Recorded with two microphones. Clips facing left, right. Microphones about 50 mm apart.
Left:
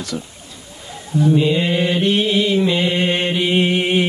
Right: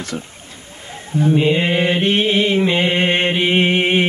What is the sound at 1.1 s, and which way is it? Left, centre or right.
Mantra, right.